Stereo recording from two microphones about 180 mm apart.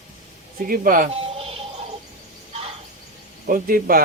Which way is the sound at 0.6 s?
50° right (ahead or behind).